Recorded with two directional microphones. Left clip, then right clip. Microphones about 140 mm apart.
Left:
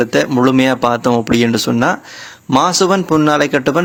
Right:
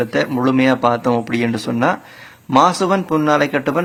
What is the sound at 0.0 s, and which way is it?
A man's voice, 35° left (ahead or behind).